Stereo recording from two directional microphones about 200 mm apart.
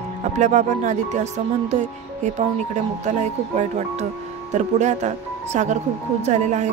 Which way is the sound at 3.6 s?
35° right (ahead or behind).